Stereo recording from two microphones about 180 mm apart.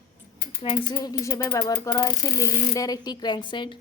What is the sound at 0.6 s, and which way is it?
Speech, 25° left (ahead or behind).